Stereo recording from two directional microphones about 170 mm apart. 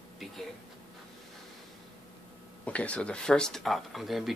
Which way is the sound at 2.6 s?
5° left (ahead or behind).